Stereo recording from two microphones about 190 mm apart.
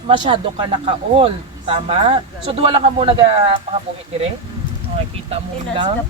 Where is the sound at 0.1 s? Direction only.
25° right (ahead or behind).